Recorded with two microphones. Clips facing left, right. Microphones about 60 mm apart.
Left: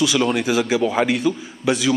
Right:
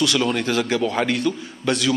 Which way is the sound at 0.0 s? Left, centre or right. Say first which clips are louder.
Left 2 dB; centre.